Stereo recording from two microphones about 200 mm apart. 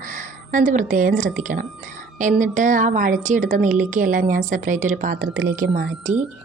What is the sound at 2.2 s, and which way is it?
Speech, 40° right (ahead or behind).